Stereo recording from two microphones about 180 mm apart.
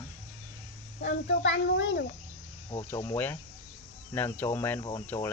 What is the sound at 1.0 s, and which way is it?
A child's voice, 85° left.